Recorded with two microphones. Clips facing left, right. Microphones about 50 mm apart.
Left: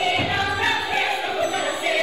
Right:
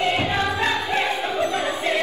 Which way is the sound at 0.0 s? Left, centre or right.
Right.